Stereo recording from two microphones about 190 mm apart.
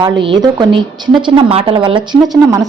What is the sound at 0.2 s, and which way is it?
A woman's voice, 25° right (ahead or behind).